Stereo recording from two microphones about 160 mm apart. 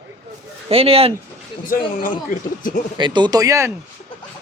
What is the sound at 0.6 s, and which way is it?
Speech, 35° right (ahead or behind).